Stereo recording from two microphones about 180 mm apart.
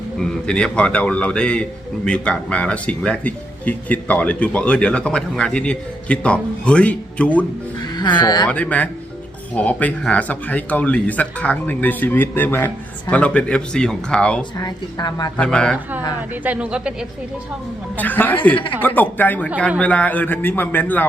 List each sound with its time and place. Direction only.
0.2 s speech: 5° left (ahead or behind)
7.8 s speech: 25° left (ahead or behind)
8.4 s speech: 10° left (ahead or behind)
14.6 s a woman's voice: 20° left (ahead or behind)
15.4 s speech: 5° left (ahead or behind)
16.3 s speech: 10° right (ahead or behind)
17.9 s speech: 10° left (ahead or behind)